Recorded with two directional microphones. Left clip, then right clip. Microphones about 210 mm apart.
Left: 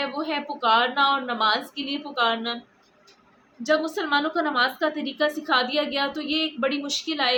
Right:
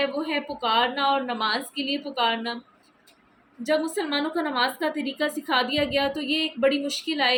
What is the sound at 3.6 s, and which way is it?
A woman's voice, 10° left (ahead or behind).